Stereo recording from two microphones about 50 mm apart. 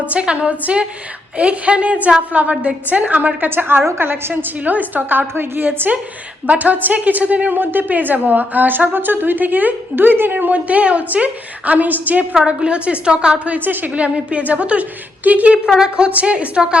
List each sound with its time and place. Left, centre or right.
0.1 s a woman's voice: right
3.5 s a woman's voice: right
6.5 s a woman's voice: right
12.3 s a woman's voice: centre
13.7 s a woman's voice: right
13.9 s a woman's voice: right
15.5 s a woman's voice: centre